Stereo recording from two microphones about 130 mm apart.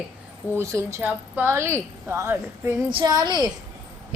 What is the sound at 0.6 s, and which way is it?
A woman's voice, 20° right (ahead or behind).